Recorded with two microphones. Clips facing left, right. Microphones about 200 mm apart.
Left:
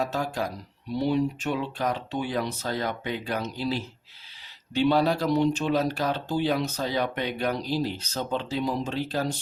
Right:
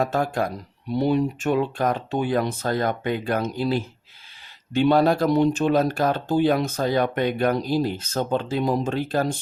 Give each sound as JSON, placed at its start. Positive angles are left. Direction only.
{"t": 0.0, "sound": "speech", "side_deg": -55}